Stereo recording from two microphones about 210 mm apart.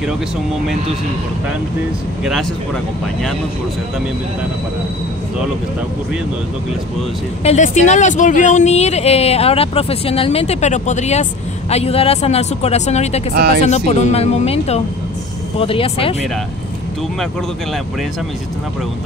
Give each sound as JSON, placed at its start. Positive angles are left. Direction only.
{"t": 7.4, "sound": "speech", "side_deg": 35}
{"t": 13.3, "sound": "speech", "side_deg": -50}
{"t": 13.7, "sound": "speech", "side_deg": 30}